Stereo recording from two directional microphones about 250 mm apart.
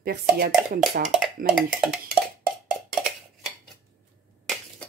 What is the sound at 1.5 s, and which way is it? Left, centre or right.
Speech, centre.